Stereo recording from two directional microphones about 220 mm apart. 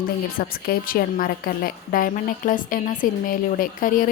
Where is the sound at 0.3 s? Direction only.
40° left (ahead or behind).